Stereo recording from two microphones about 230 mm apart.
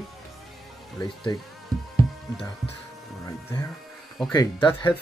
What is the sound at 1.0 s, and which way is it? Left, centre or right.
Speech, centre.